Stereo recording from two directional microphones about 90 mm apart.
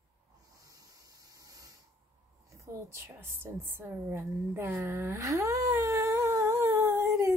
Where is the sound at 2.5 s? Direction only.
25° right (ahead or behind).